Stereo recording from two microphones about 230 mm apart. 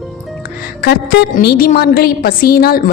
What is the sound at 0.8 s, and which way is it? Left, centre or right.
A woman's voice, left.